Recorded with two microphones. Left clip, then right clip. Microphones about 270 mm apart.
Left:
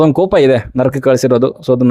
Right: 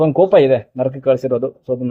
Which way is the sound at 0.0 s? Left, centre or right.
Left.